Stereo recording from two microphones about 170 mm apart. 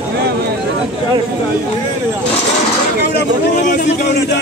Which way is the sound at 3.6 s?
50° left (ahead or behind).